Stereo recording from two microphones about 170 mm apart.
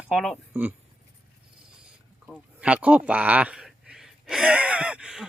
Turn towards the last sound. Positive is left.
turn(degrees=-5)  # may be behind; listen again after turning